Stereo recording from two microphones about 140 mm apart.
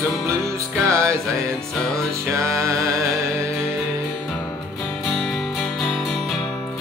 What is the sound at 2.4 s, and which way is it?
Music, 20° right (ahead or behind).